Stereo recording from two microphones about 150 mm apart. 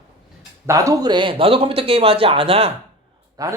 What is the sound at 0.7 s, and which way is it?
Speech, 20° right (ahead or behind).